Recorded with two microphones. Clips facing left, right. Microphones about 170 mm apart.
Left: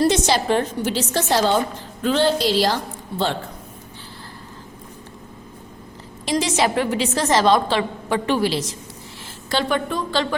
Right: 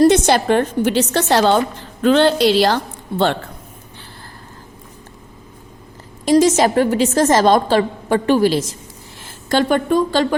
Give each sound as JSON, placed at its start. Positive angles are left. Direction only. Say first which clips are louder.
{"t": 0.0, "sound": "a woman's voice", "louder": "right 6 dB", "side_deg": -55}
{"t": 6.2, "sound": "a woman's voice", "louder": "right 8 dB", "side_deg": -45}